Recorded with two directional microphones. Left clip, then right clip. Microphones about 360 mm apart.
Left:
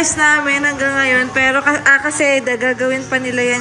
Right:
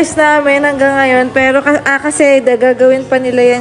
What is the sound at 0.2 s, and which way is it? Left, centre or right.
Speech, centre.